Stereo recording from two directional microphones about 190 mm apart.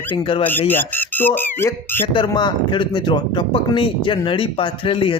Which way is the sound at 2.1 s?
25° left (ahead or behind).